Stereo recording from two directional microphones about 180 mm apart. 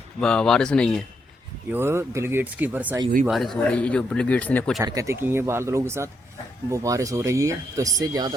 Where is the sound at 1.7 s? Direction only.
15° right (ahead or behind); by 4.7 s 10° left (ahead or behind).